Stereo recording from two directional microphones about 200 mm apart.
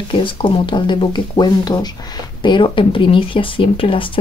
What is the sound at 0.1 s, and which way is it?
Speech, 25° left (ahead or behind).